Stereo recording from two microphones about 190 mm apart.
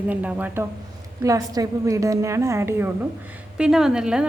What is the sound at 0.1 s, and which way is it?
A woman's voice, 10° right (ahead or behind).